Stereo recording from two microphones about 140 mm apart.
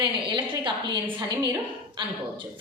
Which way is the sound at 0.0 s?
35° right (ahead or behind).